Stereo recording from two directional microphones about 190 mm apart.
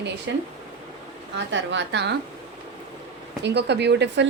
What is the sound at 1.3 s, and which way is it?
Speech, 70° right (ahead or behind).